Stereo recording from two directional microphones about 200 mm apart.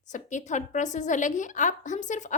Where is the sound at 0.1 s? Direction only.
40° left (ahead or behind).